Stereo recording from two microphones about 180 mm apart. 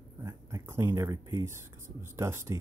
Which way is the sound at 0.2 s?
15° right (ahead or behind).